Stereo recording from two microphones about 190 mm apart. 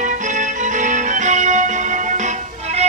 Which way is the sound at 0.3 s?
40° right (ahead or behind).